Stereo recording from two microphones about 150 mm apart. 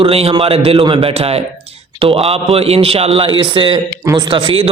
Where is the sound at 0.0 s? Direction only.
40° right (ahead or behind).